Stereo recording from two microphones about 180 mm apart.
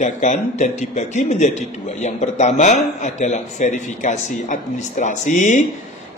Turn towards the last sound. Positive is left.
turn(degrees=45)  # may be behind; listen again after turning